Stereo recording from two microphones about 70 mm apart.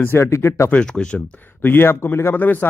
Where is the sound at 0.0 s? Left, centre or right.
Left.